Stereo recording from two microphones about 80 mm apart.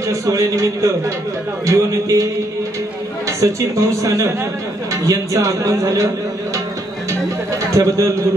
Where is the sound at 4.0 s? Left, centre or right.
Right.